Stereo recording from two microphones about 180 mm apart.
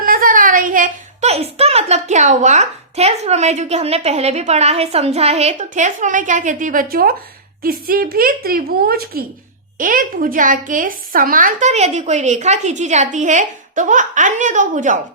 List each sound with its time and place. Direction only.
0.0 s a woman's voice: 50° right (ahead or behind)